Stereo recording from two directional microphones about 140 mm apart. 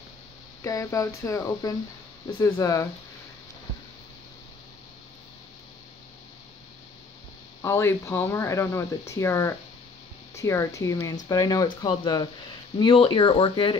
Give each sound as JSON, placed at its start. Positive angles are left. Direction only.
{"t": 0.7, "sound": "speech", "side_deg": 20}
{"t": 7.6, "sound": "speech", "side_deg": 20}